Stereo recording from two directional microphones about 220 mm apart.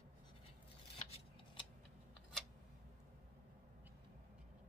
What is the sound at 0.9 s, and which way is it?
Scissors, 25° left (ahead or behind).